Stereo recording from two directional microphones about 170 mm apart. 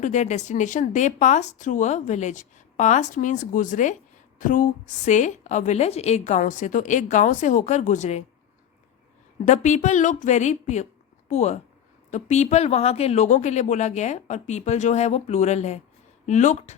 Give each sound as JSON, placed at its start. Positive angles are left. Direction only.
{"t": 0.0, "sound": "speech", "side_deg": 45}
{"t": 9.4, "sound": "speech", "side_deg": 45}